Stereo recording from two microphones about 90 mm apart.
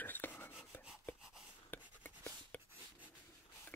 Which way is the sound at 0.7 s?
25° left (ahead or behind).